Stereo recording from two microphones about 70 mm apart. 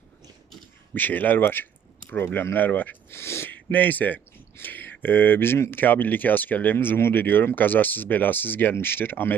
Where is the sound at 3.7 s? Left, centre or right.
Left.